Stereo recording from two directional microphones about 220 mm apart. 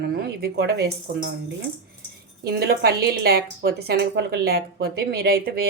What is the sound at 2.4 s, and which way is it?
A woman's voice, 45° right (ahead or behind).